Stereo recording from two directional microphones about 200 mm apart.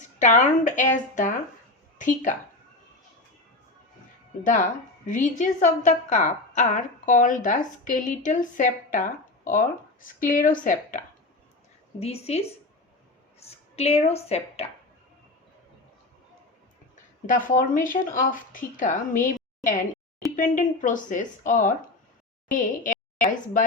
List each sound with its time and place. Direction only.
0.0 s a woman's voice: 40° left (ahead or behind)
5.0 s a woman's voice: 40° left (ahead or behind)
11.9 s a woman's voice: 30° left (ahead or behind)
13.4 s a sound: 30° left (ahead or behind)
13.7 s a woman's voice: 30° left (ahead or behind)
16.9 s a woman's voice: 40° left (ahead or behind)